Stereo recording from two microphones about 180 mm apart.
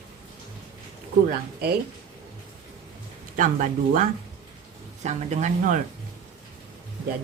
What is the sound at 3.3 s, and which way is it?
Speech, 45° right (ahead or behind).